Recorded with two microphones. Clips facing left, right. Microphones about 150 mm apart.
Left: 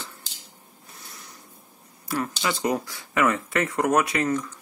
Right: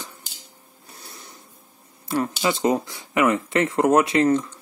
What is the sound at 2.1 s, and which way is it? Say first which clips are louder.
Speech: right 4 dB; 25° right (ahead or behind).